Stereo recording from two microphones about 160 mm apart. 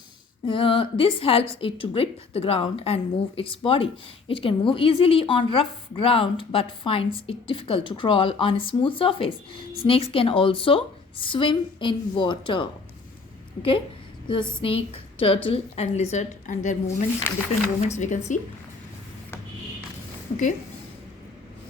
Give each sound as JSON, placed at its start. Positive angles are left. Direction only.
{"t": 0.4, "sound": "a woman's voice", "side_deg": 35}